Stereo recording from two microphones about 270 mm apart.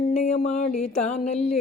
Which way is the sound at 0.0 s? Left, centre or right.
Left.